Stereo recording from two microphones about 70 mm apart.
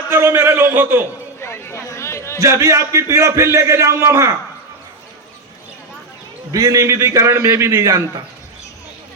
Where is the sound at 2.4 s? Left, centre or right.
Right.